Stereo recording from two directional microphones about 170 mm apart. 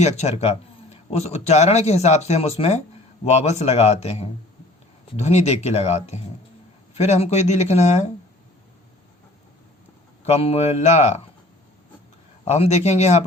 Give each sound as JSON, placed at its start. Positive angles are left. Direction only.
{"t": 0.0, "sound": "speech", "side_deg": 40}
{"t": 10.2, "sound": "speech", "side_deg": 40}
{"t": 12.5, "sound": "speech", "side_deg": 40}